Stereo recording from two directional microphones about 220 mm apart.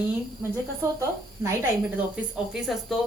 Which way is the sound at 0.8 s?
10° right (ahead or behind).